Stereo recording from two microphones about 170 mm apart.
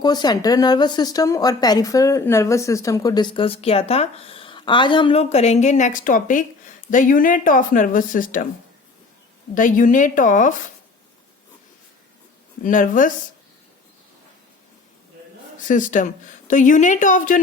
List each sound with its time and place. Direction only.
0.0 s speech: 25° left (ahead or behind); by 8.4 s 50° left (ahead or behind)
9.6 s speech: 50° left (ahead or behind)
12.6 s speech: 50° left (ahead or behind)
15.5 s speech: 50° left (ahead or behind)